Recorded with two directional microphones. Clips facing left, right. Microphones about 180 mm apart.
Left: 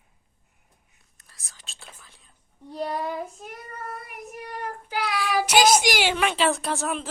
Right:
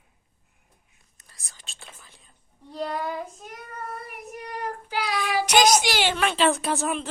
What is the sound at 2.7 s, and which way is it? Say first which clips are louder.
Child singing: left 1 dB; 5° left (ahead or behind).